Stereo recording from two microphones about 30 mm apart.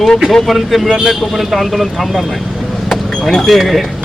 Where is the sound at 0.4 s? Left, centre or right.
Centre.